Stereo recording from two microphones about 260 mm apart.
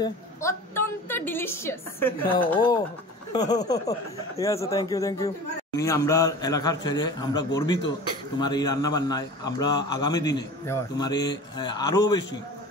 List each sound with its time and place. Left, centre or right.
0.0 s a man's voice: centre